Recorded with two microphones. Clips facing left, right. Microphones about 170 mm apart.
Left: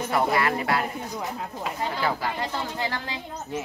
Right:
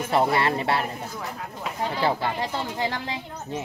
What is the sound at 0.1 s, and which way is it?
Speech, 25° right (ahead or behind).